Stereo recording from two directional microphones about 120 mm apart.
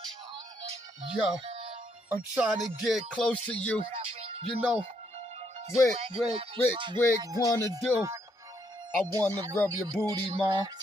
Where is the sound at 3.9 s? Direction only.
55° right (ahead or behind).